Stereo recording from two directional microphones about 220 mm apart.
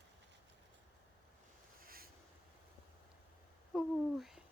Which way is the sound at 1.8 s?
40° right (ahead or behind).